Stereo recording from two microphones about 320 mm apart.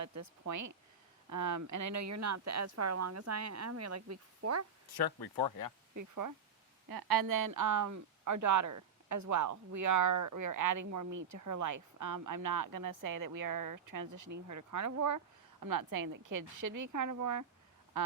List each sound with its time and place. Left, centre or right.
0.0 s a woman's voice: right
5.5 s speech: left
5.9 s a woman's voice: right
6.8 s a woman's voice: right
15.6 s a woman's voice: right
18.0 s a woman's voice: right